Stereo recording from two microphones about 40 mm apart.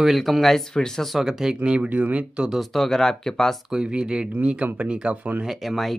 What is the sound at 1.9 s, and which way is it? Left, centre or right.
Speech, right.